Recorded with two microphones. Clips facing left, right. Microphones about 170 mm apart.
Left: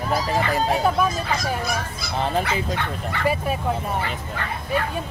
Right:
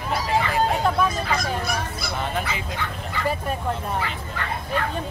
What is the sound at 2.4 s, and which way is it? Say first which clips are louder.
Speech: left 4 dB; 65° left (ahead or behind).